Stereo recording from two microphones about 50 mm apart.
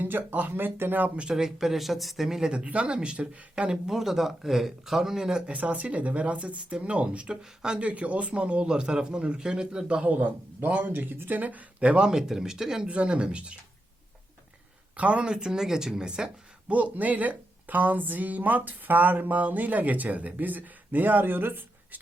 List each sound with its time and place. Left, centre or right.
0.0 s speech: right
1.3 s speech: centre
2.5 s speech: right
5.5 s a man's voice: right
10.1 s speech: right
11.3 s speech: right; by 12.9 s centre
12.9 s a man's voice: right
14.9 s speech: right
16.6 s speech: right